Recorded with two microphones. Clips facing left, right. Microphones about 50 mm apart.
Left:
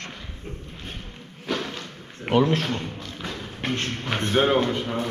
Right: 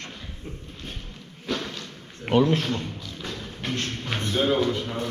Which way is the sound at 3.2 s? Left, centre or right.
Centre.